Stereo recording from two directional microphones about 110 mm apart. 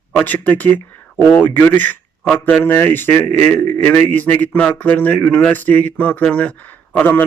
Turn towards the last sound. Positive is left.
turn(degrees=15)  # may be behind; listen again after turning